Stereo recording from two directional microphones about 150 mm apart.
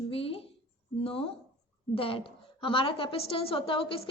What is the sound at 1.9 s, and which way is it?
A woman's voice, 40° left (ahead or behind).